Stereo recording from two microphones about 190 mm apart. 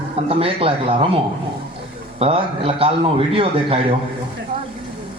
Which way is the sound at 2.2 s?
30° right (ahead or behind).